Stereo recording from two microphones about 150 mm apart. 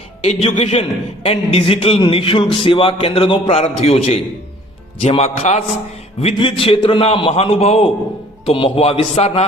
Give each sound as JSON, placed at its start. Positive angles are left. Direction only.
{"t": 0.2, "sound": "a man's voice", "side_deg": 45}
{"t": 3.6, "sound": "a man's voice", "side_deg": 45}